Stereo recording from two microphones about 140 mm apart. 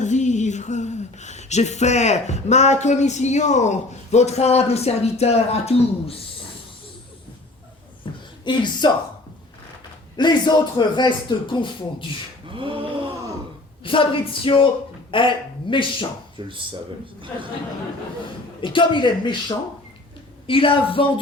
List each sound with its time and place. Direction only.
0.0 s a sound: 60° left (ahead or behind)
8.1 s a sound: 35° left (ahead or behind)
8.4 s a man's voice: 30° left (ahead or behind)
10.2 s a man's voice: 30° left (ahead or behind)
12.5 s mantra: 40° right (ahead or behind)
13.8 s a man's voice: 40° left (ahead or behind)
15.1 s a sound: 35° left (ahead or behind)
16.4 s speech: 35° right (ahead or behind)
18.6 s a man's voice: 35° left (ahead or behind)